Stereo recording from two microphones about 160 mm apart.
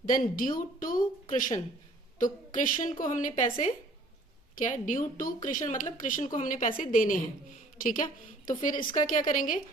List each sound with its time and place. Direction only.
0.0 s a woman's voice: 60° left (ahead or behind)